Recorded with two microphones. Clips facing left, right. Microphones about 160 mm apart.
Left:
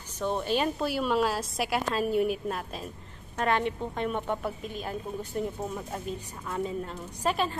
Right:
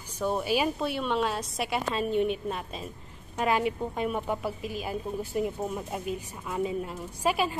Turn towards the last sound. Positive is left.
turn(degrees=-10)  # may be behind; listen again after turning